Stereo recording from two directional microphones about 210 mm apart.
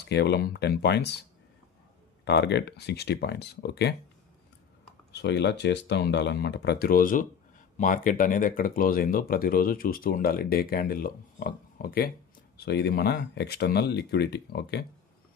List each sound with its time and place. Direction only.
0.0 s speech: 50° left (ahead or behind)
2.2 s speech: 55° left (ahead or behind)
5.1 s speech: 55° left (ahead or behind)